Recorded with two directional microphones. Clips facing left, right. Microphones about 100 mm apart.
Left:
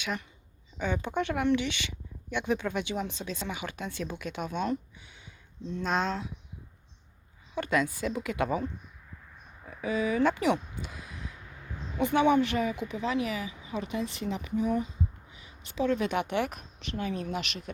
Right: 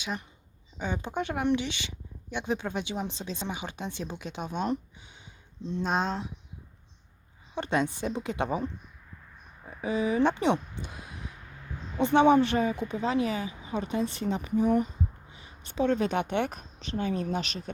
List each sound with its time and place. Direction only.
0.0 s speech: 20° right (ahead or behind)
5.8 s a woman's voice: 35° right (ahead or behind)
7.5 s a woman's voice: 25° right (ahead or behind)